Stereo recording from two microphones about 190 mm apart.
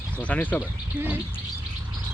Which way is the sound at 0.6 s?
10° right (ahead or behind).